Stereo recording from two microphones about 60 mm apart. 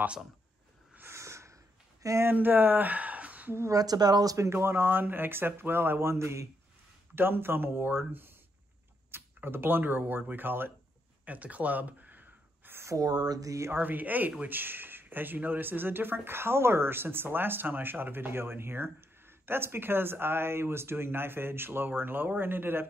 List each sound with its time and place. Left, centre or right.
1.1 s snort: right
2.3 s speech: right
3.7 s speech: right
4.5 s speech: right
7.2 s speech: right
11.2 s a sound: right
12.9 s speech: right
13.7 s speech: right